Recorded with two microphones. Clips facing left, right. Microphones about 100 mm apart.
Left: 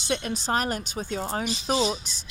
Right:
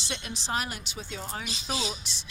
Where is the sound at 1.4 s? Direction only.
50° left (ahead or behind).